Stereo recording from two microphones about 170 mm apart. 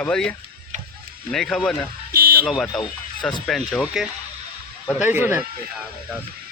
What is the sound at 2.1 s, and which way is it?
Vehicle, 60° right (ahead or behind).